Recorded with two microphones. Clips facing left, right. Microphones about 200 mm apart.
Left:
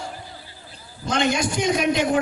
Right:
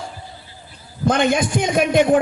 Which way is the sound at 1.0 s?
55° right (ahead or behind).